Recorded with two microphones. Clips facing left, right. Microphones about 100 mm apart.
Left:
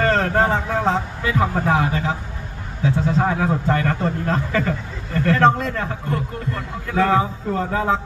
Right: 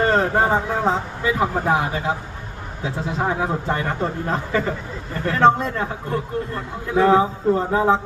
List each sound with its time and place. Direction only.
0.0 s a man's voice: 15° right (ahead or behind)